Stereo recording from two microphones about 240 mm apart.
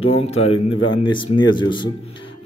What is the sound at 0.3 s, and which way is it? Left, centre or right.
Speech, left.